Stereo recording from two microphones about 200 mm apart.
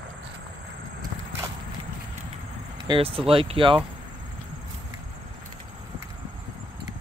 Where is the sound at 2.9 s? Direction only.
30° right (ahead or behind).